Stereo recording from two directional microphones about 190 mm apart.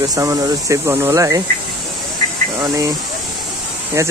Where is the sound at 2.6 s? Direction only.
15° right (ahead or behind).